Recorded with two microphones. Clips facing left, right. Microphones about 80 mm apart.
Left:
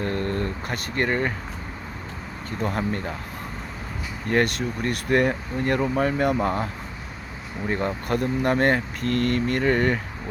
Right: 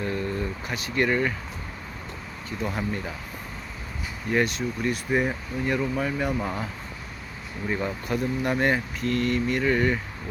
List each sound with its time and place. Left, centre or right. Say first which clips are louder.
0.0 s a sound: left 2 dB; left
2.5 s speech: left 3 dB; left
4.3 s speech: left 2 dB; left
6.4 s speech: left 6 dB; left
7.7 s speech: left 3 dB; left